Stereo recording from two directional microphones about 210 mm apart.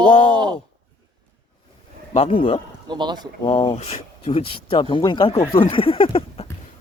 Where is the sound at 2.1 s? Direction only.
25° left (ahead or behind).